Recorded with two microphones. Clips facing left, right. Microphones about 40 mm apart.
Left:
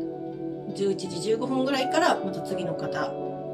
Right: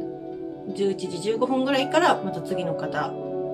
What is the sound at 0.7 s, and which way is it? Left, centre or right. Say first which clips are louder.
Speech: right 2 dB; right.